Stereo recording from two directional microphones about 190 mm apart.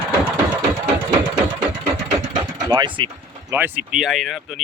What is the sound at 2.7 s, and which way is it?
Speech, 25° right (ahead or behind).